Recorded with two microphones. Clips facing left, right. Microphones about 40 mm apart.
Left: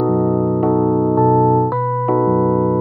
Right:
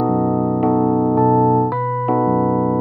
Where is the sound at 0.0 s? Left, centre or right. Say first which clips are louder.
Left 1 dB; centre.